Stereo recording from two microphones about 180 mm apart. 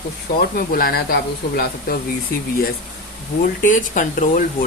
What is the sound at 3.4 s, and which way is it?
Speech, 45° left (ahead or behind).